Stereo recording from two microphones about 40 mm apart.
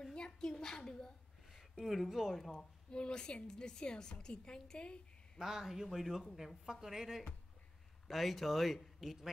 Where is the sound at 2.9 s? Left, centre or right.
Left.